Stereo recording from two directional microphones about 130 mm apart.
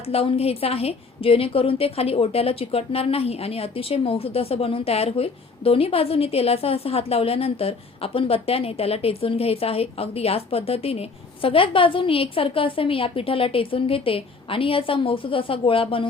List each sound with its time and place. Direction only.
0.1 s a woman's voice: 50° left (ahead or behind)